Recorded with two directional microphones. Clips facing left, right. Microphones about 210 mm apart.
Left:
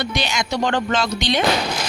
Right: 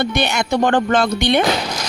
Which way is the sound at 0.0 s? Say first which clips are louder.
Right 5 dB; 60° right (ahead or behind).